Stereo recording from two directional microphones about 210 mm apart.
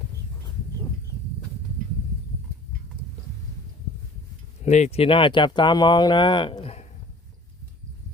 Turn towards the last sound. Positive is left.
turn(degrees=30)  # may be behind; listen again after turning